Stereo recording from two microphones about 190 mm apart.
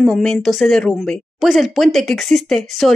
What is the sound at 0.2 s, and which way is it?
Speech, centre (ahead or behind).